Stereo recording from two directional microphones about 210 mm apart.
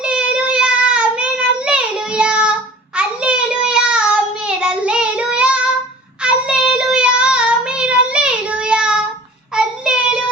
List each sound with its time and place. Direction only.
0.0 s child singing: 5° right (ahead or behind)